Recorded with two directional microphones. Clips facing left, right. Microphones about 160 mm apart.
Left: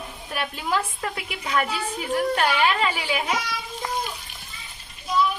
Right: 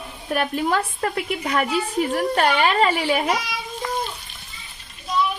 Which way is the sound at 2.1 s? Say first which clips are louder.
Even; 40° right (ahead or behind).